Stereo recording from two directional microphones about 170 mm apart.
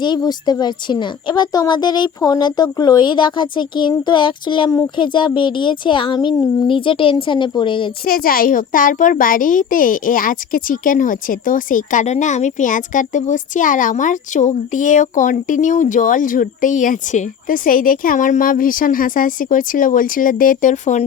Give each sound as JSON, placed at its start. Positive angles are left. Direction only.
{"t": 0.0, "sound": "speech", "side_deg": 25}
{"t": 8.0, "sound": "a child's voice", "side_deg": 60}